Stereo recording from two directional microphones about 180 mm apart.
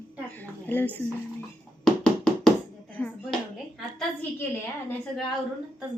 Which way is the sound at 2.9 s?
10° left (ahead or behind).